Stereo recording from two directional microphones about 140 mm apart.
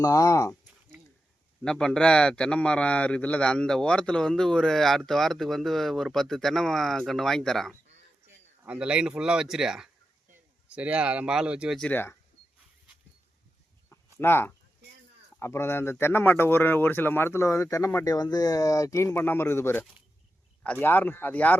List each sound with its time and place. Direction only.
0.0 s speech: 25° left (ahead or behind)
1.6 s a man's voice: 5° left (ahead or behind)
8.6 s a man's voice: 10° right (ahead or behind)
11.8 s speech: 15° left (ahead or behind)
13.9 s a sound: 15° left (ahead or behind)
15.4 s speech: 20° left (ahead or behind)